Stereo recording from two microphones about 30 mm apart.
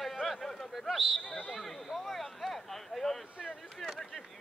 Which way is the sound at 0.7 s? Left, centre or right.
Centre.